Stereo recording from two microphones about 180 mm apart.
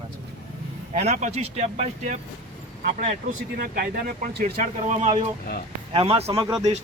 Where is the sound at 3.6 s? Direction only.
55° right (ahead or behind).